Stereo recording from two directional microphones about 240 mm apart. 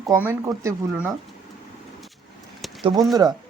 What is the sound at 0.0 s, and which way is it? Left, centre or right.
Speech, centre.